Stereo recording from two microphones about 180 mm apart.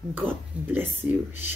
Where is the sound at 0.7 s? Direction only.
10° right (ahead or behind).